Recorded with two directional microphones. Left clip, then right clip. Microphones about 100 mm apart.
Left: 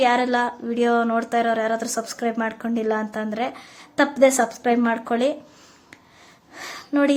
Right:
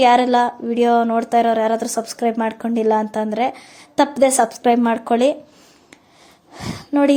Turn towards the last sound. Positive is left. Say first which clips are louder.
# right 4 dB
turn(degrees=-35)  # may be behind; listen again after turning